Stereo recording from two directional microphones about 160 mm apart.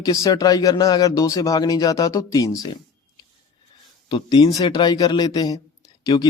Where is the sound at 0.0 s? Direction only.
20° left (ahead or behind).